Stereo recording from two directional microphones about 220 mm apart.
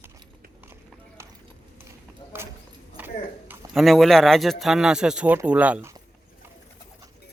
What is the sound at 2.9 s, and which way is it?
Speech, 10° right (ahead or behind).